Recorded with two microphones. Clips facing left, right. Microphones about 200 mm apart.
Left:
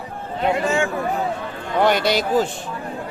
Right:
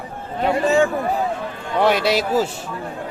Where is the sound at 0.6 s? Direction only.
35° right (ahead or behind).